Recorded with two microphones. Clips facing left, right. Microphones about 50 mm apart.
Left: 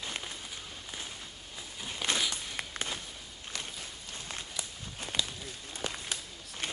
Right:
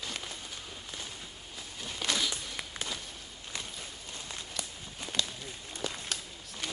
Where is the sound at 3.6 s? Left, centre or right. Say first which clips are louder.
Even; centre.